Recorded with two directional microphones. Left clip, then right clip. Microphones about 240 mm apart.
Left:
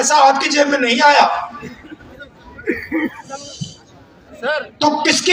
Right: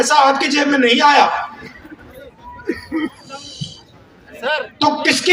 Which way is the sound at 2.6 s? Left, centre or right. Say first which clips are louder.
Left 2 dB; left.